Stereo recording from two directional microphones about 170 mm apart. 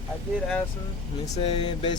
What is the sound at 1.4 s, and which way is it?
Speech, 30° left (ahead or behind).